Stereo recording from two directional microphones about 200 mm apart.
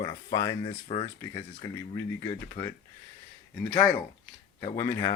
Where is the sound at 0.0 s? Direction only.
20° left (ahead or behind).